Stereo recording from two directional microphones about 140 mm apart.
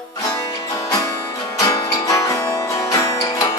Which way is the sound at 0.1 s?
25° left (ahead or behind).